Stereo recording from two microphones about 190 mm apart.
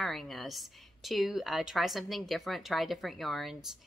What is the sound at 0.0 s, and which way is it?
A woman's voice, centre (ahead or behind).